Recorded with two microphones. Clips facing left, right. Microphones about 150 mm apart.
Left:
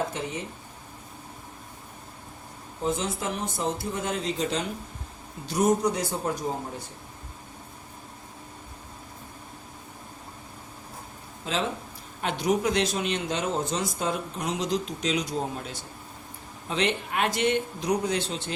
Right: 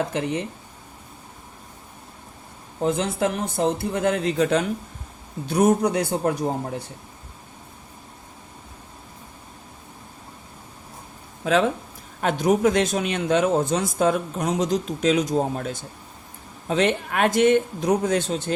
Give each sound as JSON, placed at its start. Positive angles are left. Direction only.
{"t": 2.8, "sound": "speech", "side_deg": -65}
{"t": 11.4, "sound": "speech", "side_deg": -60}
{"t": 12.2, "sound": "speech", "side_deg": -45}